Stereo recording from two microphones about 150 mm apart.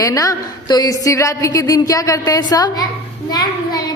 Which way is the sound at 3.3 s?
25° left (ahead or behind).